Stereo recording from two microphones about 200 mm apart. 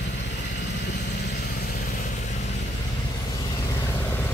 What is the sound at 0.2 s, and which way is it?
Vehicle, 60° left (ahead or behind).